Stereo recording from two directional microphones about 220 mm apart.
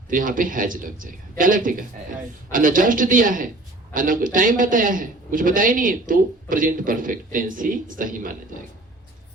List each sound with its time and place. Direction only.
0.1 s a man's voice: 40° right (ahead or behind)